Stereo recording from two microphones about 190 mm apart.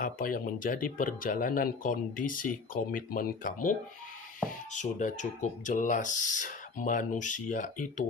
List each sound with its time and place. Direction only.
0.0 s speech: 45° left (ahead or behind)